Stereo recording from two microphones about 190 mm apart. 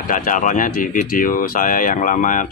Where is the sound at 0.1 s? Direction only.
45° left (ahead or behind).